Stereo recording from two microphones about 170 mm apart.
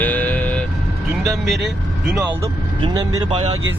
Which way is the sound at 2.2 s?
20° right (ahead or behind).